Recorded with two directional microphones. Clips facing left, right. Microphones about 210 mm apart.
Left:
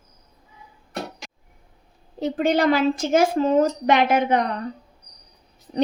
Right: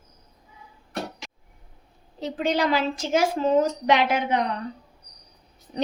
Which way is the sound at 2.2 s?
50° left (ahead or behind).